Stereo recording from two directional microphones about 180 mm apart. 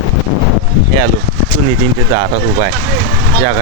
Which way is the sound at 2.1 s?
20° right (ahead or behind).